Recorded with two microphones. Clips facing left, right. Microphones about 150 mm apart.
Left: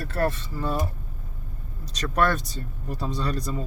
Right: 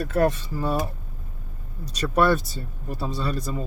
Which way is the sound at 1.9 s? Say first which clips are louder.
Right 3 dB; 10° right (ahead or behind).